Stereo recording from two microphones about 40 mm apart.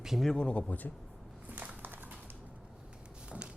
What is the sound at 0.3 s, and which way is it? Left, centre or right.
Speech, left.